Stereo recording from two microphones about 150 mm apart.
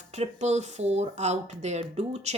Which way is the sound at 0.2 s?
50° right (ahead or behind).